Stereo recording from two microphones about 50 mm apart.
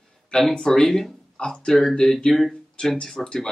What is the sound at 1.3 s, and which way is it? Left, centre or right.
Speech, centre.